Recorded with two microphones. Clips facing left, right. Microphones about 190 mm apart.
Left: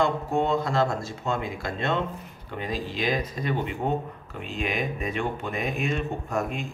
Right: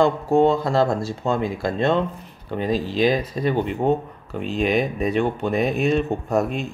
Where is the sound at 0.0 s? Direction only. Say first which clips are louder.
Right 8 dB; 35° right (ahead or behind).